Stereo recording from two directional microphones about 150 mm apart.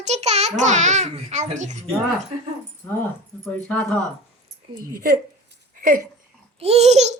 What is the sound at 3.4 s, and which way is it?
Speech, 5° left (ahead or behind).